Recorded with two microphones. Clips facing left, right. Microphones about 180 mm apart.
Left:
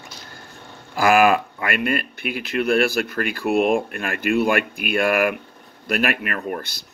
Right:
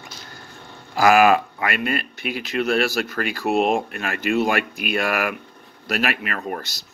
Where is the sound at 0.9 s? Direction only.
50° left (ahead or behind).